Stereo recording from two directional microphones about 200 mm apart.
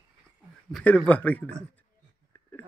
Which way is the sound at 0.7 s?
5° left (ahead or behind).